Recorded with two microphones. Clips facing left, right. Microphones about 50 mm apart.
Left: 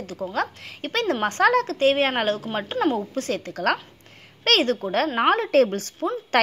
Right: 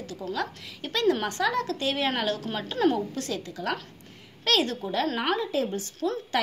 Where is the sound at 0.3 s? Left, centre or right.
Left.